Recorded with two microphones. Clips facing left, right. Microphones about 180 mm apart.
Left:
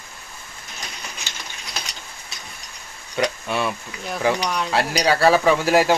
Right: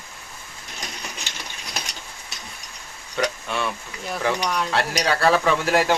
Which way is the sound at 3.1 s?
5° left (ahead or behind).